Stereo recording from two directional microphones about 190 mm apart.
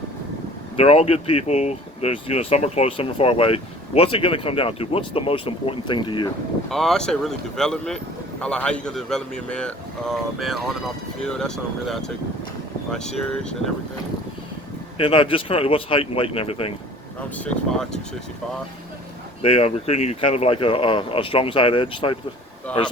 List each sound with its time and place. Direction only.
0.8 s speech: 30° left (ahead or behind)
6.7 s speech: centre (ahead or behind)
14.9 s speech: 30° left (ahead or behind)
17.3 s speech: 5° left (ahead or behind)
19.4 s speech: 30° left (ahead or behind)
22.7 s speech: 5° left (ahead or behind)